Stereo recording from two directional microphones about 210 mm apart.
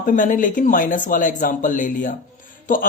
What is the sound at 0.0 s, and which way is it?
A man's voice, 40° left (ahead or behind).